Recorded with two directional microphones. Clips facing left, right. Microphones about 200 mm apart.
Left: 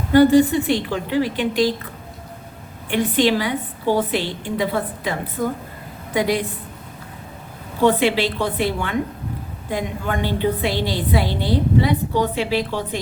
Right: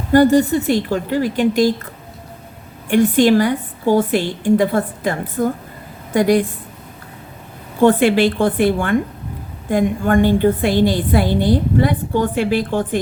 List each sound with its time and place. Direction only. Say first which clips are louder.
0.1 s a woman's voice: right 1 dB; 45° right (ahead or behind)
2.9 s a woman's voice: right 6 dB; 45° right (ahead or behind)
7.9 s a woman's voice: right 4 dB; 50° right (ahead or behind)